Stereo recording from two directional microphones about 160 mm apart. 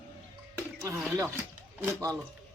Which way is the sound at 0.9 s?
5° right (ahead or behind).